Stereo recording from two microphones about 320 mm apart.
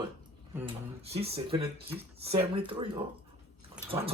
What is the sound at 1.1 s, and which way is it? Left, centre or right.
Speech, centre.